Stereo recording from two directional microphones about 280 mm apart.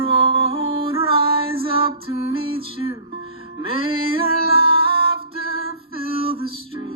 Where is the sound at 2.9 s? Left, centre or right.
Centre.